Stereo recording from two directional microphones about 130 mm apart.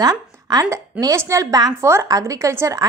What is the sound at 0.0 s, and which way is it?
A woman's voice, 30° right (ahead or behind).